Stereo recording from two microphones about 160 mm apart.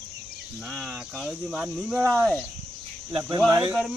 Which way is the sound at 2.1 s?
10° left (ahead or behind).